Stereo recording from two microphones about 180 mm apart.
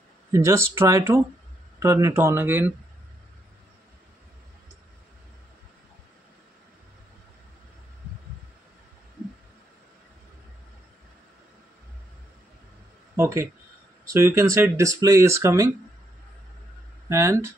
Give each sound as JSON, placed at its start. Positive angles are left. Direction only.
{"t": 0.3, "sound": "speech", "side_deg": -15}
{"t": 13.1, "sound": "speech", "side_deg": -15}
{"t": 17.1, "sound": "speech", "side_deg": -15}